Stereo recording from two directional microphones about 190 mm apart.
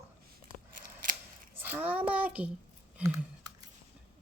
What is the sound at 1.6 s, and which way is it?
Speech, 10° right (ahead or behind).